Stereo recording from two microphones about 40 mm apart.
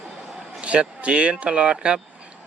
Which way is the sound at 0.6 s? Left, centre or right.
Right.